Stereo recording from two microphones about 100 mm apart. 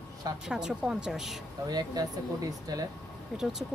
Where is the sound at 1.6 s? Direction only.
40° right (ahead or behind).